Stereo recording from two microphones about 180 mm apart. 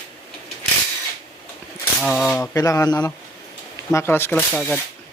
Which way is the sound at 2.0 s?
Centre (ahead or behind).